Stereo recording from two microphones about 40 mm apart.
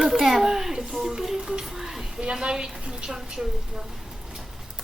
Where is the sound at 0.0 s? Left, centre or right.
Centre; by 3.1 s right.